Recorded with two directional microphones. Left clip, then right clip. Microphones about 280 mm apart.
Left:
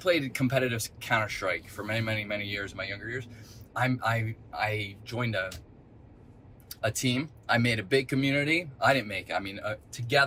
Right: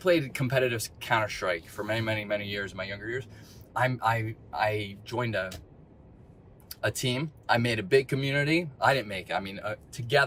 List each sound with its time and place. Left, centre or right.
0.0 s speech: centre
6.7 s speech: centre